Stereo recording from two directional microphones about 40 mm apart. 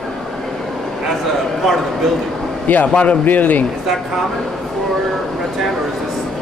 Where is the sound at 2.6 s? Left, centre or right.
Left.